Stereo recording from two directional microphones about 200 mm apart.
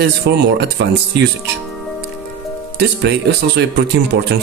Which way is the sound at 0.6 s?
60° right (ahead or behind).